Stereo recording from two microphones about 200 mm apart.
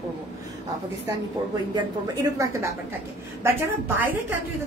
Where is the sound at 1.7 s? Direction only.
15° right (ahead or behind).